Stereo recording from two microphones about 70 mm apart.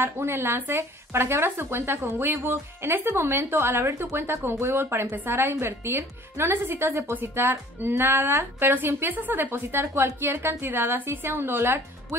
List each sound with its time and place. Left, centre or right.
0.0 s speech: right